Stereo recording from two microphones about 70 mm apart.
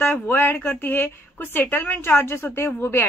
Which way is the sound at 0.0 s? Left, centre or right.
Left.